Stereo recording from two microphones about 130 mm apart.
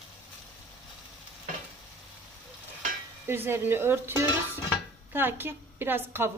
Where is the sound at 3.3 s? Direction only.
15° right (ahead or behind).